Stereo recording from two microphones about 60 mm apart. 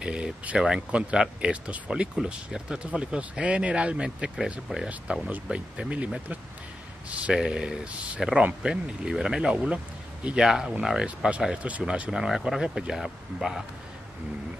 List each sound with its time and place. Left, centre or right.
0.0 s speech: centre
8.2 s speech: centre